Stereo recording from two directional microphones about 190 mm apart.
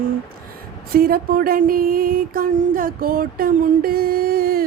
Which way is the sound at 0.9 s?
50° right (ahead or behind).